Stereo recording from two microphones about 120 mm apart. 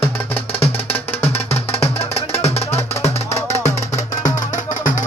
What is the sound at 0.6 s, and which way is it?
Music, 55° left (ahead or behind).